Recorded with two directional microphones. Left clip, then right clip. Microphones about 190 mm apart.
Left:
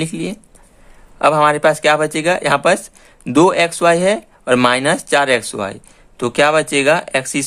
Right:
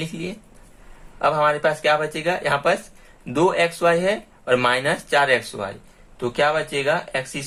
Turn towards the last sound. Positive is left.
turn(degrees=50)  # may be behind; listen again after turning